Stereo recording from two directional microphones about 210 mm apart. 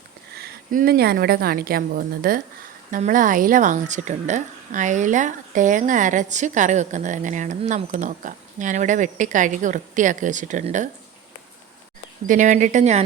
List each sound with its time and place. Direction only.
0.3 s a woman's voice: 45° right (ahead or behind)
12.3 s a woman's voice: 35° right (ahead or behind)